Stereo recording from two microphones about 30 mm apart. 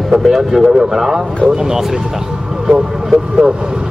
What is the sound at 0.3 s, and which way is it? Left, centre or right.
Speech, centre.